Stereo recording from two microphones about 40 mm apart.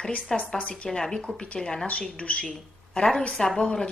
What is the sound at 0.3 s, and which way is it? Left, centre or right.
Speech, centre.